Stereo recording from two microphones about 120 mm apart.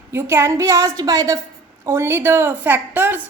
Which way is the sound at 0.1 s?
20° right (ahead or behind).